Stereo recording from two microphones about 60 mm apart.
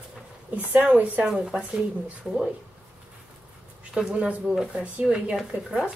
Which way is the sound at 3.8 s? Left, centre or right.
Centre.